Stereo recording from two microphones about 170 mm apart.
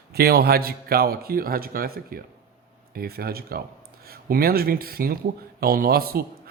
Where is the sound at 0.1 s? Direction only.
65° right (ahead or behind).